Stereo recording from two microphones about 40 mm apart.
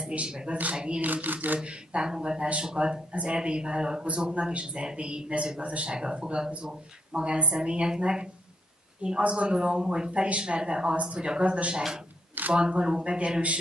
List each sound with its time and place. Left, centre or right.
0.0 s a man's voice: right
0.5 s speech: right
0.7 s speech: right
1.0 s speech: right
1.6 s speech: right